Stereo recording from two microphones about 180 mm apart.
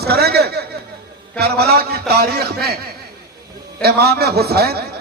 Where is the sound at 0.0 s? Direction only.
60° right (ahead or behind).